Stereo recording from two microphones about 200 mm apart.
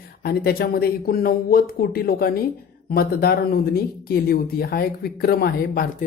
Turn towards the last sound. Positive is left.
turn(degrees=50)  # may be behind; listen again after turning